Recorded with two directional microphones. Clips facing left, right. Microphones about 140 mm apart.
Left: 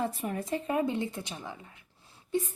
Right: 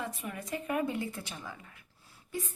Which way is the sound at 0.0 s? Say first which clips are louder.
Left 7 dB; 35° left (ahead or behind).